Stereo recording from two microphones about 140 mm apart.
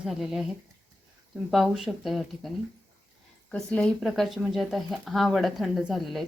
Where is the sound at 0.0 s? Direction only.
5° right (ahead or behind).